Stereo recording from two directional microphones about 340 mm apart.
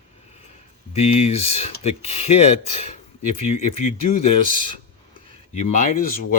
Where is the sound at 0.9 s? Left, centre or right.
Centre.